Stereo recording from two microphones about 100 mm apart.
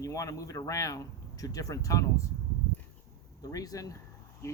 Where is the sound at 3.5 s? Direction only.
35° left (ahead or behind).